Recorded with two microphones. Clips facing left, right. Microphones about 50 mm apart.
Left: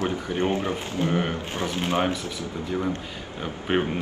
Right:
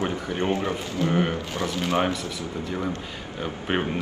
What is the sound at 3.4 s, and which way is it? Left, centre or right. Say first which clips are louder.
Speech: left 1 dB; centre.